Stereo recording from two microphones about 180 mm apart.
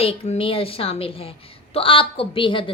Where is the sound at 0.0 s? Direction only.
30° left (ahead or behind).